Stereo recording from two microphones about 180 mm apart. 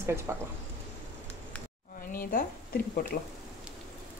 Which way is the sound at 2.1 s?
55° left (ahead or behind).